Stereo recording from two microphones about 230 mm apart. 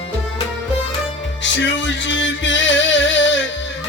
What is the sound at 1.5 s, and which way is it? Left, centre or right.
Music, left.